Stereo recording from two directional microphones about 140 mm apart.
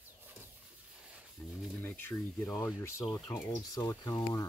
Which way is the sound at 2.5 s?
20° left (ahead or behind).